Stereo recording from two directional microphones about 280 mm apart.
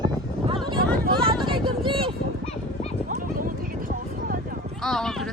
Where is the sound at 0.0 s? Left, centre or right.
Centre.